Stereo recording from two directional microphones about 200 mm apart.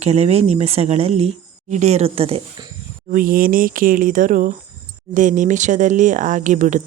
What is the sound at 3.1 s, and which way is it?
Speech, 45° right (ahead or behind).